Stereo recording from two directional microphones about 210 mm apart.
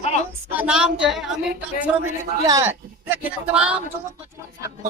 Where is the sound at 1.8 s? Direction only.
15° right (ahead or behind).